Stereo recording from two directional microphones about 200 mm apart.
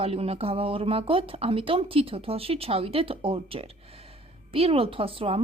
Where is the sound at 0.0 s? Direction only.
30° right (ahead or behind).